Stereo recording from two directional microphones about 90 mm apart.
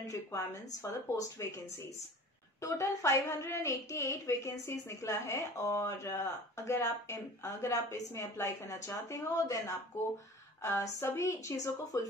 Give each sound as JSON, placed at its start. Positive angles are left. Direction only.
{"t": 0.0, "sound": "a woman's voice", "side_deg": 35}
{"t": 2.6, "sound": "a woman's voice", "side_deg": 35}